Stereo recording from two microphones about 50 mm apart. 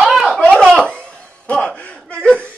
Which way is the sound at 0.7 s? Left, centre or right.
Centre.